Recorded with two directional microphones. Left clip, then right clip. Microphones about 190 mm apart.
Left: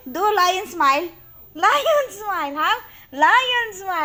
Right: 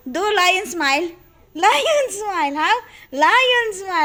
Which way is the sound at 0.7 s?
65° right (ahead or behind).